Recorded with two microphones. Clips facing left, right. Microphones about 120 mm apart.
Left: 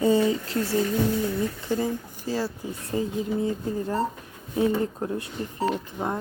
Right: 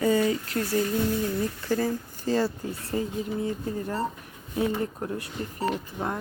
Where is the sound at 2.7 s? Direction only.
25° left (ahead or behind).